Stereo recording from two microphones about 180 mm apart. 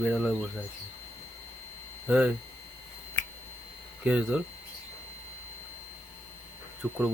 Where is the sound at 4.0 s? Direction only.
5° right (ahead or behind).